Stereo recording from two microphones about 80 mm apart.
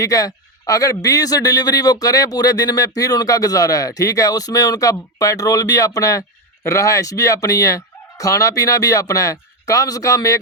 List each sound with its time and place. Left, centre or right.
0.0 s a man's voice: left